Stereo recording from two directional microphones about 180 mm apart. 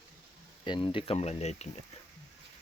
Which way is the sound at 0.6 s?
25° left (ahead or behind).